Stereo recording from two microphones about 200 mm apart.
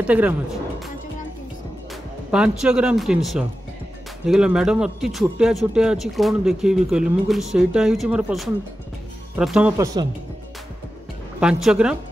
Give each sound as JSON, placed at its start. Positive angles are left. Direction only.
{"t": 0.0, "sound": "speech", "side_deg": -5}
{"t": 2.3, "sound": "speech", "side_deg": -5}
{"t": 11.3, "sound": "speech", "side_deg": -5}